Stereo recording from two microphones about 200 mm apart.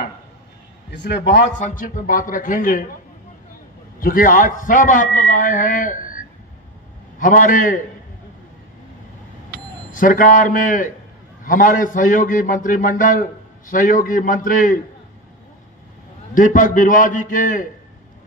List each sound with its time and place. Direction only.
0.8 s a man's voice: 55° left (ahead or behind)
1.6 s a man's voice: 45° left (ahead or behind)
4.0 s a man's voice: 45° left (ahead or behind)
7.2 s a man's voice: 40° left (ahead or behind)
9.8 s a man's voice: 40° left (ahead or behind)
16.3 s a man's voice: 40° left (ahead or behind)